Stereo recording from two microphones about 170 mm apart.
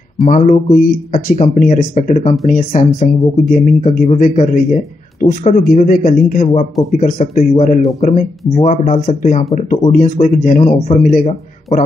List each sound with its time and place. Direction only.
0.2 s speech: 45° left (ahead or behind)